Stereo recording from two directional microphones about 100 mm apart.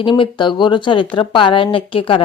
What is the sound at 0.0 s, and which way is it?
Speech, 50° left (ahead or behind).